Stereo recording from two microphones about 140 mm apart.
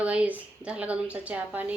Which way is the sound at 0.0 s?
10° right (ahead or behind).